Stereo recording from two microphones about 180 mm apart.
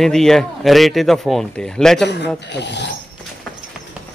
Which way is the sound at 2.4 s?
70° left (ahead or behind).